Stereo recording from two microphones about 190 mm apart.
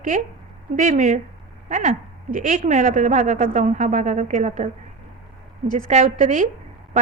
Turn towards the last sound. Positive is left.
turn(degrees=-40)  # may be behind; listen again after turning